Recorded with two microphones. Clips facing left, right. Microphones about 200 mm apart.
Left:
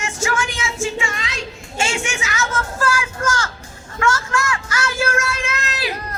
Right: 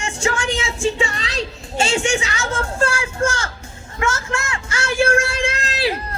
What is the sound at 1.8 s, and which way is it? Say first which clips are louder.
Speech: right 5 dB; 35° right (ahead or behind).